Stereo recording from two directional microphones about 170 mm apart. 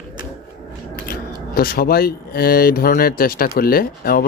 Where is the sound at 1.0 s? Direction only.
60° left (ahead or behind).